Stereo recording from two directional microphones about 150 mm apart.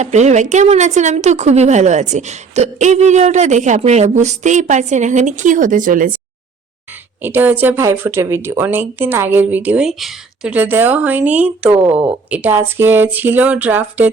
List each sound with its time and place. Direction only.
0.0 s a woman's voice: 50° right (ahead or behind)
7.2 s speech: 15° right (ahead or behind)